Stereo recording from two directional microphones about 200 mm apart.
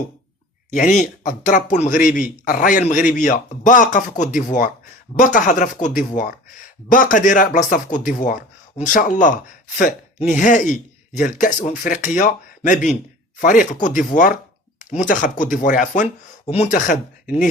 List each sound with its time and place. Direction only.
0.7 s speech: 40° left (ahead or behind)